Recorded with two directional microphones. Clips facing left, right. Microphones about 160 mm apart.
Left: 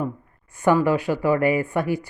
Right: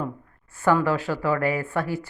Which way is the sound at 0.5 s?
15° left (ahead or behind).